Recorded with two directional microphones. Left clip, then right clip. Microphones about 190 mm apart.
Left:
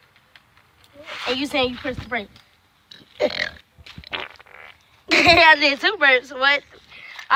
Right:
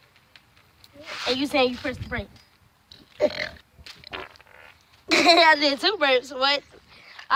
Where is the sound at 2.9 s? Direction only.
25° left (ahead or behind).